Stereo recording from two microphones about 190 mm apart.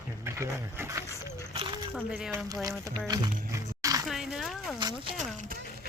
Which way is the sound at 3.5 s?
20° right (ahead or behind).